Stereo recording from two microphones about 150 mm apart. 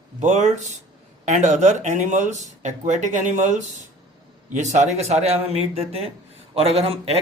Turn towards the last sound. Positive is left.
turn(degrees=-45)  # may be behind; listen again after turning